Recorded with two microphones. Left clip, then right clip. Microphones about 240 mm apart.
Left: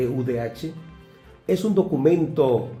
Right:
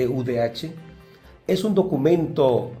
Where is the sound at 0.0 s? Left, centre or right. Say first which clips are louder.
Right 3 dB; right.